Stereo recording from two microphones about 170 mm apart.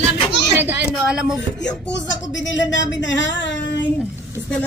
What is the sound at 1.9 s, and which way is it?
Speech, 90° left.